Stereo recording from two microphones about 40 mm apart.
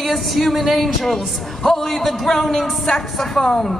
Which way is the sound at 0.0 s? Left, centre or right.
Centre.